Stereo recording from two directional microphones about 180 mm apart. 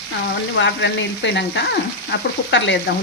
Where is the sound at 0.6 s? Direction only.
85° left.